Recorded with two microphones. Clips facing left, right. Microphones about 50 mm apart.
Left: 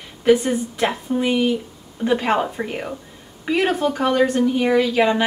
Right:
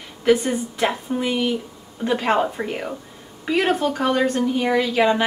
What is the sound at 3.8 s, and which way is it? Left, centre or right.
Speech, centre.